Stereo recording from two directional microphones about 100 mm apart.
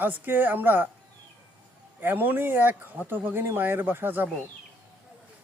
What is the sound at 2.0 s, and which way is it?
Speech, 20° right (ahead or behind).